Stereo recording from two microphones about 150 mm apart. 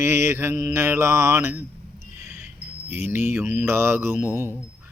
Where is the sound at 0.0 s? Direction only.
20° right (ahead or behind).